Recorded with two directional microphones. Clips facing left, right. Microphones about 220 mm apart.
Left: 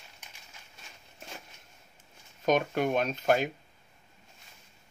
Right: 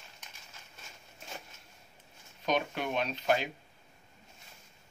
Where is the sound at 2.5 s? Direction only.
45° left (ahead or behind).